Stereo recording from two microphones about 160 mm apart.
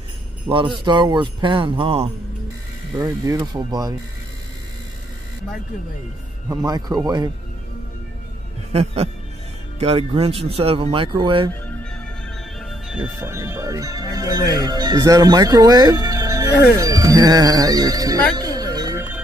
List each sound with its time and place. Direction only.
0.5 s speech: 30° right (ahead or behind)
3.0 s speech: 20° right (ahead or behind)
6.5 s speech: 20° right (ahead or behind)
8.7 s speech: 40° right (ahead or behind)
12.5 s speech: centre (ahead or behind); by 18.2 s 25° right (ahead or behind)
18.3 s music: 25° right (ahead or behind)